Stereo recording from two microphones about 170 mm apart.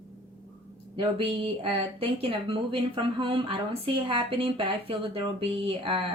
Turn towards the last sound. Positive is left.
turn(degrees=-35)  # may be behind; listen again after turning